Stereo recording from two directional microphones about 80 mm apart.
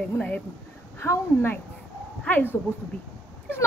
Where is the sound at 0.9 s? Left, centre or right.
Left.